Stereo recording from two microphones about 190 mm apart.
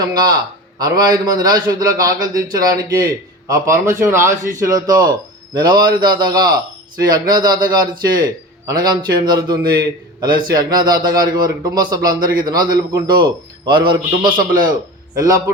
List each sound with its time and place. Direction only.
0.0 s a man's voice: 20° right (ahead or behind)
12.2 s a man's voice: 50° right (ahead or behind)
12.5 s a man's voice: 20° right (ahead or behind)
14.3 s a man's voice: 45° right (ahead or behind)